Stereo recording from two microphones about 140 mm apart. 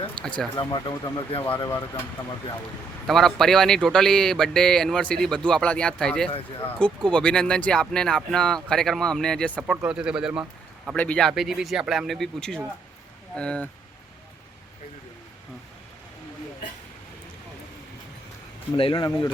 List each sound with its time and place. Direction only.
0.5 s speech: 30° left (ahead or behind)
3.1 s speech: centre (ahead or behind)
10.9 s speech: 10° left (ahead or behind)
18.8 s speech: 35° left (ahead or behind)